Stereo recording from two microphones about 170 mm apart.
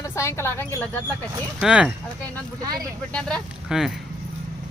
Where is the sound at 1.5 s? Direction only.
5° right (ahead or behind).